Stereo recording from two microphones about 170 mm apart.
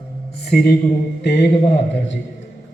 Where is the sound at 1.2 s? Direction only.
80° left.